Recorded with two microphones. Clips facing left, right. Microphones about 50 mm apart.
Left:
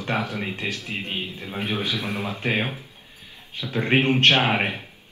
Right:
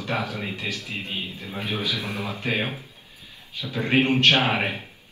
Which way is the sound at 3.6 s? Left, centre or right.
Left.